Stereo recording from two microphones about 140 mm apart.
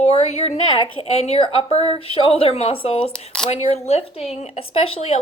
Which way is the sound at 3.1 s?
5° left (ahead or behind).